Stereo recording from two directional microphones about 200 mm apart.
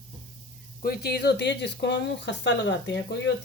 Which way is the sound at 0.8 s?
50° left (ahead or behind).